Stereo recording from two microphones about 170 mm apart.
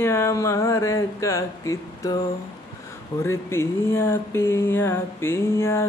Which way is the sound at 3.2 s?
15° left (ahead or behind).